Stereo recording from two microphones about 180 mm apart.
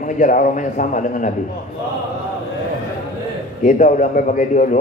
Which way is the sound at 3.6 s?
45° left (ahead or behind).